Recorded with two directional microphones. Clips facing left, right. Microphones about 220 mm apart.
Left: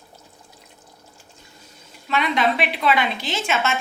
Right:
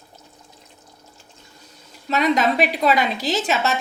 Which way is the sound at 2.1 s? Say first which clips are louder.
Right 3 dB; 40° right (ahead or behind).